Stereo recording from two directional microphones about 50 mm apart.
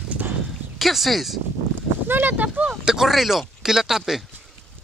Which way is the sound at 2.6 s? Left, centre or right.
Centre.